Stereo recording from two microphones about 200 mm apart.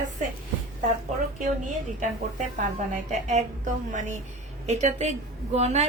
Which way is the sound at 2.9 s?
35° right (ahead or behind).